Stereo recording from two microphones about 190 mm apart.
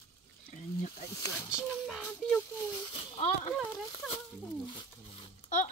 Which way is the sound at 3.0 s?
30° left (ahead or behind).